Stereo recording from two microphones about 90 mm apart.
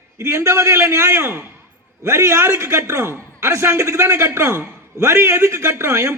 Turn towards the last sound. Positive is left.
turn(degrees=-30)  # may be behind; listen again after turning